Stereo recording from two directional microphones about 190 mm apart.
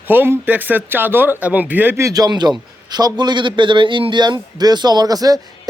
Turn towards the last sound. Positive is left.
turn(degrees=-20)  # may be behind; listen again after turning